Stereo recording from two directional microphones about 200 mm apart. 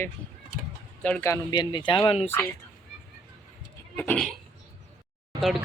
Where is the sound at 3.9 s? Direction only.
10° left (ahead or behind).